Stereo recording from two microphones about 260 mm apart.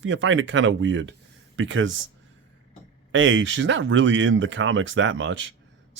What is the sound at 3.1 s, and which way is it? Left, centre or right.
Speech, right.